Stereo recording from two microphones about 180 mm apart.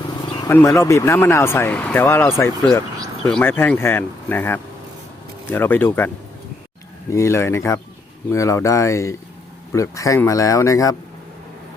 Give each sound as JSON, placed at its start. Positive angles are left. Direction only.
{"t": 0.1, "sound": "a sound", "side_deg": 25}
{"t": 0.5, "sound": "speech", "side_deg": 15}
{"t": 7.1, "sound": "speech", "side_deg": 15}